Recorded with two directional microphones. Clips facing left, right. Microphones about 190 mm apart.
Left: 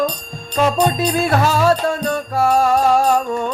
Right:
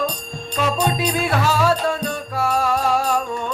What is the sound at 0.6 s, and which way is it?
Music, 40° left (ahead or behind).